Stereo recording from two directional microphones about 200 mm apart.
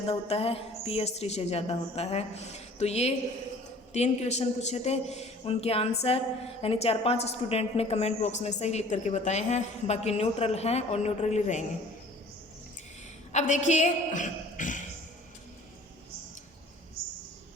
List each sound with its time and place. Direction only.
0.1 s a woman's voice: 30° left (ahead or behind)
13.3 s a woman's voice: 35° left (ahead or behind)